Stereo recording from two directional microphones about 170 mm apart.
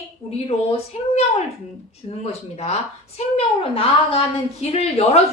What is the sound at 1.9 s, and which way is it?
A woman's voice, 40° left (ahead or behind).